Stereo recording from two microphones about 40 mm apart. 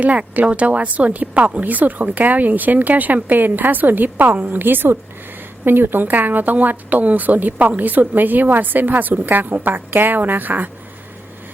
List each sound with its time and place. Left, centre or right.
0.4 s speech: right